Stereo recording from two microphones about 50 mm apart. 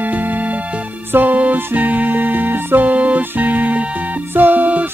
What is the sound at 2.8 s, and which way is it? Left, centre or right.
Music, right.